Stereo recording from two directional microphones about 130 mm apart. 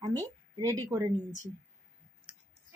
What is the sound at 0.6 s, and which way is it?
Speech, 25° right (ahead or behind).